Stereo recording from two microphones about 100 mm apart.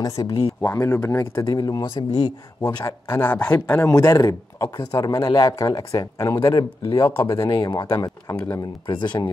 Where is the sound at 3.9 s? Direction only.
30° left (ahead or behind).